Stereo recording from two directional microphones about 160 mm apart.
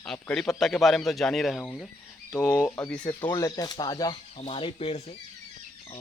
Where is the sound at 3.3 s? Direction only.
20° left (ahead or behind).